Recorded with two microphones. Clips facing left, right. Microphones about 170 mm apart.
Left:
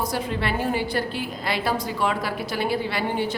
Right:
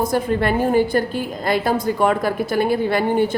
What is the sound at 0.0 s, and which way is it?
A woman's voice, 50° right (ahead or behind).